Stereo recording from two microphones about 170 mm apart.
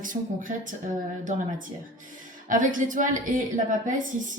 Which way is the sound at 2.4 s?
50° right (ahead or behind).